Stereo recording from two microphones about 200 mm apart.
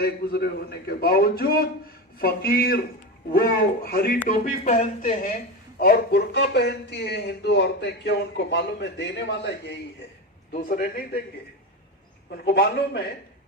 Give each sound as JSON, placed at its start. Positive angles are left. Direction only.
{"t": 0.0, "sound": "a man's voice", "side_deg": 50}
{"t": 4.4, "sound": "speech", "side_deg": 35}
{"t": 5.8, "sound": "speech", "side_deg": 50}
{"t": 10.5, "sound": "a man's voice", "side_deg": 40}
{"t": 12.5, "sound": "a man's voice", "side_deg": 55}